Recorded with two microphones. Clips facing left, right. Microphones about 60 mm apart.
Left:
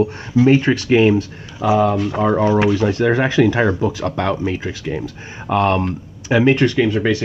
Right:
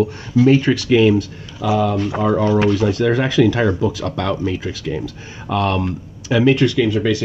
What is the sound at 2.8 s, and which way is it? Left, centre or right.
Speech, left.